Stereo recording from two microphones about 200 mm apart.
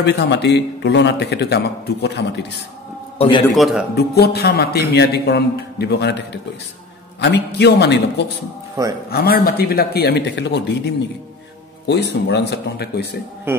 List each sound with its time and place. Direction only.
0.0 s a man's voice: 60° left (ahead or behind)
3.2 s a man's voice: 25° left (ahead or behind)
3.5 s a man's voice: centre (ahead or behind)
3.9 s a man's voice: 50° left (ahead or behind)
8.8 s speech: 15° right (ahead or behind)
9.1 s a man's voice: 50° left (ahead or behind)
11.9 s a man's voice: 60° left (ahead or behind)
13.5 s speech: 10° right (ahead or behind)